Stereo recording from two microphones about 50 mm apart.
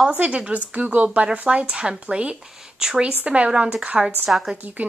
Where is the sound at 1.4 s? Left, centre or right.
Centre.